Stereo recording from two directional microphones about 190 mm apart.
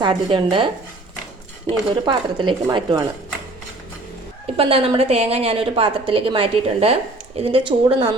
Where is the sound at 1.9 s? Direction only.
25° right (ahead or behind).